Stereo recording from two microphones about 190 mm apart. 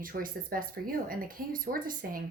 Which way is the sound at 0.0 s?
50° right (ahead or behind).